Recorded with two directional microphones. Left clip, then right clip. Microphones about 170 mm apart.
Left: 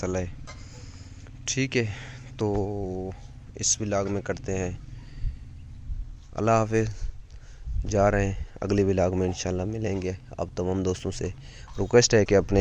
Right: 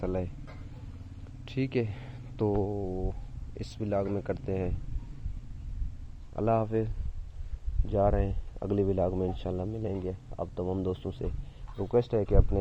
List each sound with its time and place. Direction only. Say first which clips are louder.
0.0 s speech: left 3 dB; 10° left (ahead or behind)
1.5 s speech: left 5 dB; 10° left (ahead or behind)
6.3 s speech: left 5 dB; 15° left (ahead or behind)
11.8 s speech: left 8 dB; 35° left (ahead or behind)